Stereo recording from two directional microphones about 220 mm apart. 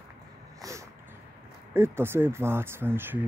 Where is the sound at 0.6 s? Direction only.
15° right (ahead or behind).